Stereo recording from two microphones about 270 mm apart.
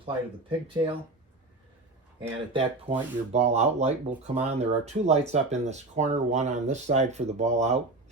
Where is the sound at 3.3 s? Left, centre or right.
Right.